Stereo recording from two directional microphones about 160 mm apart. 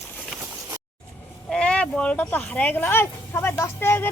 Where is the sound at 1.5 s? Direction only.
5° left (ahead or behind).